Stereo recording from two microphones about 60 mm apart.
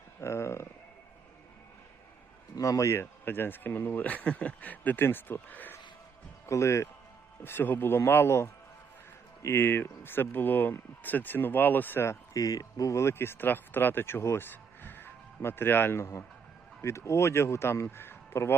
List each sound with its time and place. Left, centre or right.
0.2 s a sound: left
2.6 s speech: left
6.4 s a man's voice: left
7.4 s speech: left
12.3 s speech: left
14.4 s a sound: left
15.4 s speech: left
16.8 s speech: left